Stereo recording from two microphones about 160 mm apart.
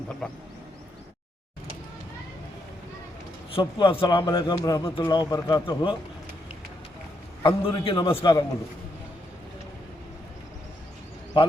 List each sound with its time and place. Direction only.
0.2 s speech: 5° left (ahead or behind)
3.5 s a man's voice: 30° left (ahead or behind)
7.4 s a man's voice: 30° left (ahead or behind)